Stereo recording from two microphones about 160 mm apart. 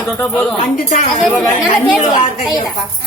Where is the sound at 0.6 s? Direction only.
50° left (ahead or behind).